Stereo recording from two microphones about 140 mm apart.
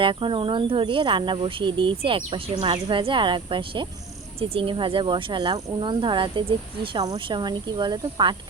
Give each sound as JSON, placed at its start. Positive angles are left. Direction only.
{"t": 0.0, "sound": "speech", "side_deg": -35}